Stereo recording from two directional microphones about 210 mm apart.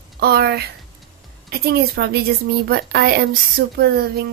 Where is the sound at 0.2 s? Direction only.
50° right (ahead or behind).